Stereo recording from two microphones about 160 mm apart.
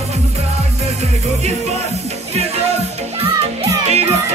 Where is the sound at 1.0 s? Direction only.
45° right (ahead or behind).